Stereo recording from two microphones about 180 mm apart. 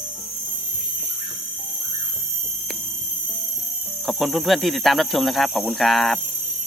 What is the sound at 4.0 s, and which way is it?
Speech, centre (ahead or behind).